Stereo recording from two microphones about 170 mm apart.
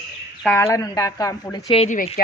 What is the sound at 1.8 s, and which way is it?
Speech, 50° left (ahead or behind).